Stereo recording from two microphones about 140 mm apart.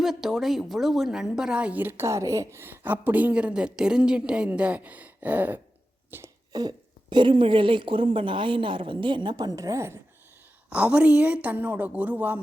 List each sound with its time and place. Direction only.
0.0 s a woman's voice: centre (ahead or behind); by 10.0 s 20° right (ahead or behind)
10.7 s a woman's voice: 10° right (ahead or behind)